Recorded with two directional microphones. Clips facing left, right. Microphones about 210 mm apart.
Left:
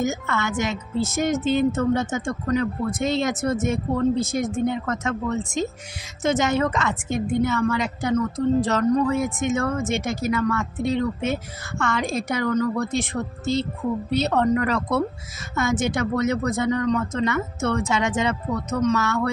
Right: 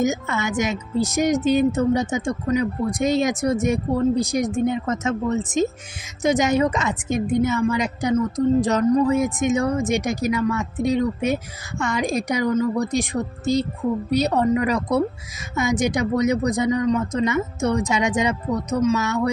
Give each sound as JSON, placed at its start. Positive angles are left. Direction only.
{"t": 0.0, "sound": "a woman's voice", "side_deg": -20}